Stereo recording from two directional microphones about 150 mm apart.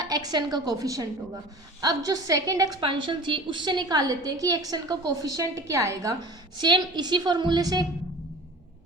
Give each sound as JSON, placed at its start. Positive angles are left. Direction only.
{"t": 0.0, "sound": "a woman's voice", "side_deg": -25}